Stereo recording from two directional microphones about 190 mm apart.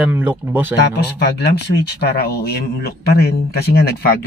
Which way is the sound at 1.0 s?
60° left (ahead or behind).